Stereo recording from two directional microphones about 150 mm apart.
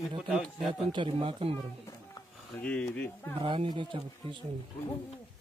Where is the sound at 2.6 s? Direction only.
5° left (ahead or behind).